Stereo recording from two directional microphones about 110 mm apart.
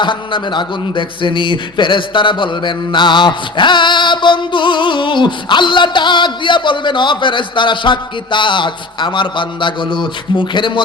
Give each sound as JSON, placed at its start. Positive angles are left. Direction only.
{"t": 0.0, "sound": "a man's voice", "side_deg": 50}